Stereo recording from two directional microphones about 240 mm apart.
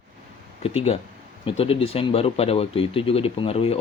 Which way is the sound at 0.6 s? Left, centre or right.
Left.